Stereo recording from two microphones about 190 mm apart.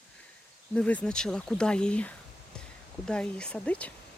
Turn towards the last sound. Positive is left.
turn(degrees=5)  # may be behind; listen again after turning